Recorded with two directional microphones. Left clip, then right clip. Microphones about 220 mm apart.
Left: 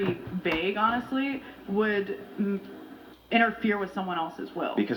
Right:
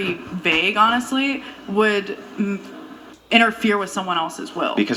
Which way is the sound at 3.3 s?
40° right (ahead or behind).